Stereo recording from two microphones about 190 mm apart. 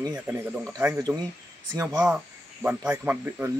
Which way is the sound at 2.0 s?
10° right (ahead or behind).